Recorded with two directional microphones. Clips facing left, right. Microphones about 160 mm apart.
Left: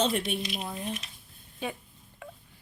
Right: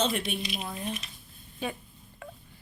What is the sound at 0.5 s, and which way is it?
Speech, 25° left (ahead or behind).